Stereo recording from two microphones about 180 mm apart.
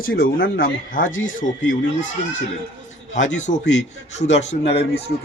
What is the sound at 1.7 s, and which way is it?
Speech, 45° left (ahead or behind).